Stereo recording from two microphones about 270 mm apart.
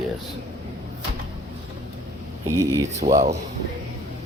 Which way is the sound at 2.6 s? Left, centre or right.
Centre.